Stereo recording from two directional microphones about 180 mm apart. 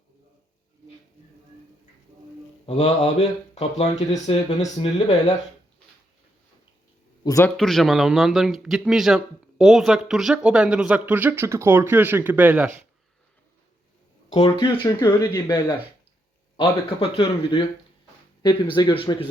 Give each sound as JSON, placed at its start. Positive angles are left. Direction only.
{"t": 2.6, "sound": "speech", "side_deg": 35}
{"t": 7.3, "sound": "speech", "side_deg": 15}
{"t": 7.5, "sound": "speech", "side_deg": 0}
{"t": 14.3, "sound": "speech", "side_deg": 35}
{"t": 14.6, "sound": "speech", "side_deg": 20}